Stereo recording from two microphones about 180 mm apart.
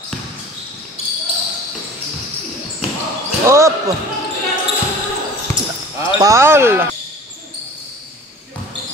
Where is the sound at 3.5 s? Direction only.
15° right (ahead or behind).